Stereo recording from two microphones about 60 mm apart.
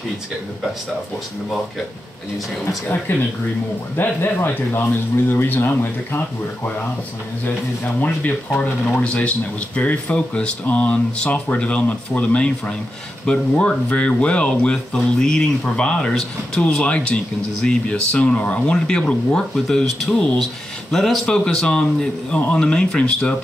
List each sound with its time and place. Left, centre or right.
3.1 s speech: left
4.7 s speech: left
5.3 s speech: left
8.9 s speech: left
15.1 s speech: centre